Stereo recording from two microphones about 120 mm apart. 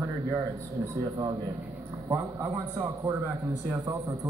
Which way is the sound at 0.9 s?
30° right (ahead or behind).